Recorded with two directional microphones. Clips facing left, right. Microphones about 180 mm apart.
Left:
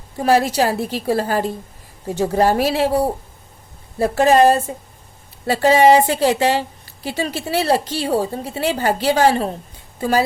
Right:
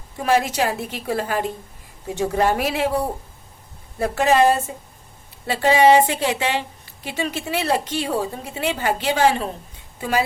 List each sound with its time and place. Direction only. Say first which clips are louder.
0.2 s a woman's voice: left 4 dB; 35° left (ahead or behind)